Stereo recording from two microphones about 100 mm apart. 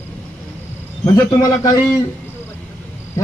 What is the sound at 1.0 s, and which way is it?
Speech, 35° left (ahead or behind).